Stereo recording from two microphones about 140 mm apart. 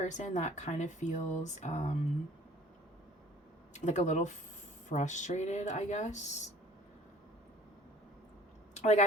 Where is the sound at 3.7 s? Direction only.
55° left (ahead or behind).